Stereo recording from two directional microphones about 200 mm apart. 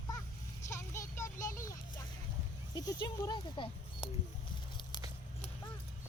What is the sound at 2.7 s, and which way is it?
Speech, 20° left (ahead or behind).